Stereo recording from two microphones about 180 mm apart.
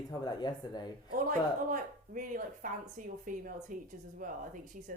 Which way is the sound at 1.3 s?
45° right (ahead or behind).